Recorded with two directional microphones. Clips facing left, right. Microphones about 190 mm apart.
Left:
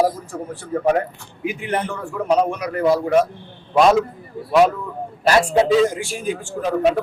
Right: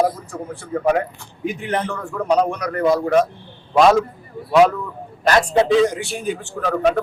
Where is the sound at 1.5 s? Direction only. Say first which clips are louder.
Even; 10° left (ahead or behind).